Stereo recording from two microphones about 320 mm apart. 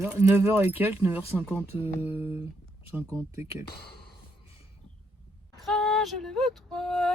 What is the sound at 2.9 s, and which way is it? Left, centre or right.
Speech, centre.